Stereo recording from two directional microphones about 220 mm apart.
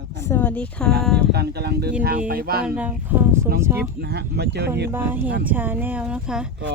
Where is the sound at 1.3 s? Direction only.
45° right (ahead or behind).